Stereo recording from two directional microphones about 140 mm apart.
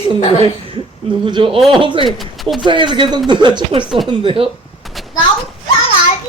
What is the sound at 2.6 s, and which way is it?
Speech, 35° right (ahead or behind).